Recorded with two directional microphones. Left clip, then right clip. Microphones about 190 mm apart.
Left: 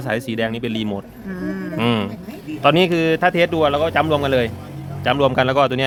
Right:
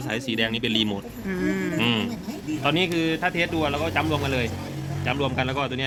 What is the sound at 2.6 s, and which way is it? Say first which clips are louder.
Speech: left 8 dB; 65° left (ahead or behind).